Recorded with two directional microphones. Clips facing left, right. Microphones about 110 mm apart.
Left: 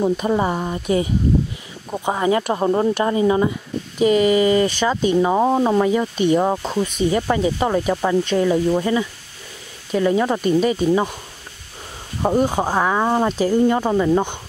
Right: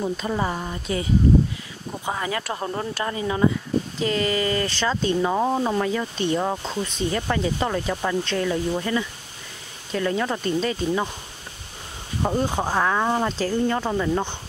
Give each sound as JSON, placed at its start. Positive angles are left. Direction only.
{"t": 0.2, "sound": "speech", "side_deg": 20}
{"t": 2.0, "sound": "speech", "side_deg": 25}
{"t": 12.2, "sound": "speech", "side_deg": 15}